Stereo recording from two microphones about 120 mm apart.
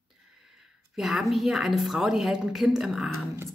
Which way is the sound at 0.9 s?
Centre (ahead or behind).